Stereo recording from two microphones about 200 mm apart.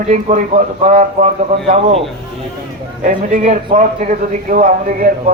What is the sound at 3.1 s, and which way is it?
A man's voice, 35° right (ahead or behind).